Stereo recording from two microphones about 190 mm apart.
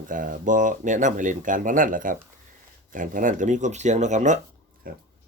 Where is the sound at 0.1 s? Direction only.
45° right (ahead or behind).